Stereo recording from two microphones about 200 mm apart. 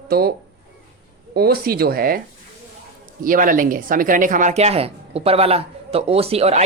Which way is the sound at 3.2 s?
45° right (ahead or behind).